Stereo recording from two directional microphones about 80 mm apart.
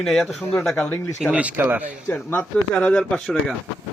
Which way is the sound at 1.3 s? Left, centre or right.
Centre.